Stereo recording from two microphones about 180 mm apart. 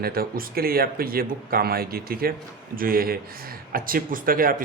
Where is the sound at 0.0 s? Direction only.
55° right (ahead or behind).